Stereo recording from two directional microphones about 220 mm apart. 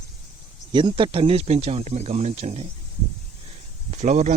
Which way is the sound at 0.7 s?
20° right (ahead or behind).